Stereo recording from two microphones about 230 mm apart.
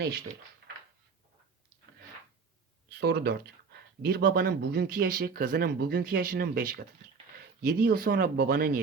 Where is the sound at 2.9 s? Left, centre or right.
Right.